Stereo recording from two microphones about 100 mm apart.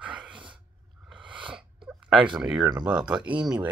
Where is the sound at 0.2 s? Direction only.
55° right (ahead or behind).